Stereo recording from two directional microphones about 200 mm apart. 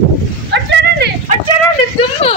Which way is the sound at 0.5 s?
55° right (ahead or behind).